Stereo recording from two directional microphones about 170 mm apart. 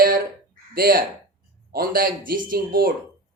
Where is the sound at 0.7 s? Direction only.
60° right (ahead or behind).